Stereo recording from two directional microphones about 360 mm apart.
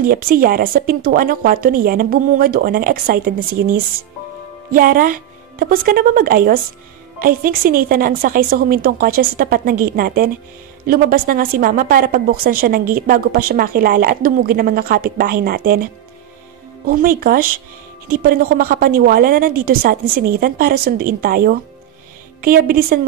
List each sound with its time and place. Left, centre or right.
0.0 s a woman's voice: right
16.9 s a woman's voice: right